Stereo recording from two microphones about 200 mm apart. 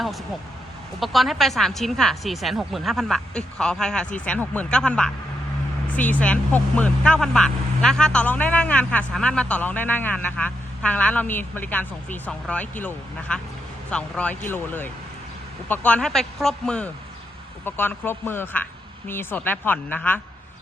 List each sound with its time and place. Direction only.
0.9 s speech: centre (ahead or behind)